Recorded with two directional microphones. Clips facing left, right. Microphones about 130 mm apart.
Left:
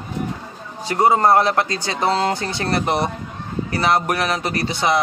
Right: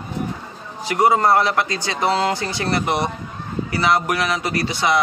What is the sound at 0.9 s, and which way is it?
Speech, 30° left (ahead or behind).